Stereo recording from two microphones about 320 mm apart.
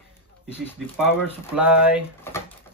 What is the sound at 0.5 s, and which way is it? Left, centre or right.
Speech, centre.